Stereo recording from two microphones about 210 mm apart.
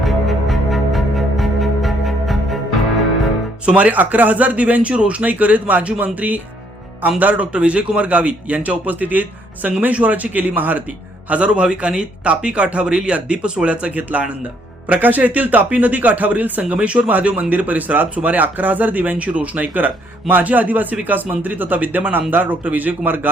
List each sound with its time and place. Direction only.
0.0 s music: centre (ahead or behind)
3.7 s speech: 5° right (ahead or behind)